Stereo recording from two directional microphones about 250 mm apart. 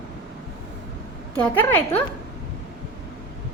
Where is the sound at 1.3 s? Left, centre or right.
Centre.